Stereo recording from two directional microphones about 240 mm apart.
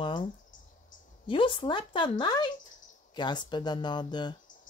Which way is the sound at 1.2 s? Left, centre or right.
Left.